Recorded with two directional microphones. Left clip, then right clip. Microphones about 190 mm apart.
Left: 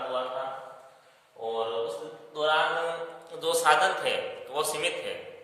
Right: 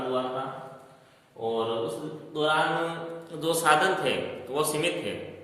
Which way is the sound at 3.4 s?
15° left (ahead or behind).